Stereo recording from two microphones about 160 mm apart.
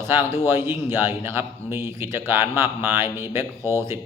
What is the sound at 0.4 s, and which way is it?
A man's voice, 15° right (ahead or behind).